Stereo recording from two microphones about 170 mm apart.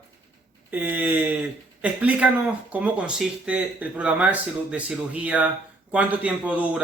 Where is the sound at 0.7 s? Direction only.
10° right (ahead or behind).